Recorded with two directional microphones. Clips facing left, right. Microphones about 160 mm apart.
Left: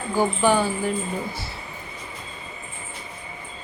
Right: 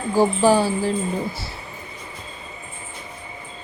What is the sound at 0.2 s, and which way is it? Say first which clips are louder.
Speech: right 4 dB; 35° right (ahead or behind).